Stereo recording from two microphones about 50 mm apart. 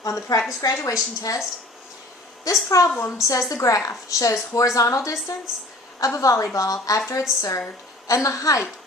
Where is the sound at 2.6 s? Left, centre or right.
Left.